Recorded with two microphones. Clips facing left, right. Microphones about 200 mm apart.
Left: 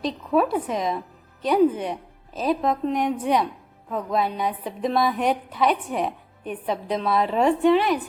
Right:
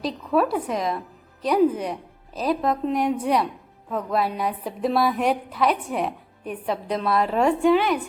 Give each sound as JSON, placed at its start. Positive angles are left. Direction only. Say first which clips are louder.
{"t": 0.0, "sound": "a woman's voice", "louder": "even", "side_deg": 0}